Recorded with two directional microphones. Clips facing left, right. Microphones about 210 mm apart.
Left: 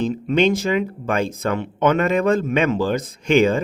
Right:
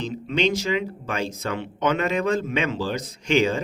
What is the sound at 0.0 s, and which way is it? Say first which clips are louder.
Speech: left 6 dB; 50° left (ahead or behind).